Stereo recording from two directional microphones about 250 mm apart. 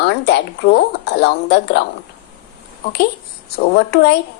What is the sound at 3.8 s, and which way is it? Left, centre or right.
Speech, left.